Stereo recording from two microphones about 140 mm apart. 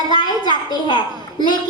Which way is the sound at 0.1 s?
30° left (ahead or behind).